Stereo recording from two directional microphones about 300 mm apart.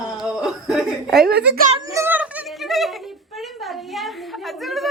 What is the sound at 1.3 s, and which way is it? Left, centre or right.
Speech, right.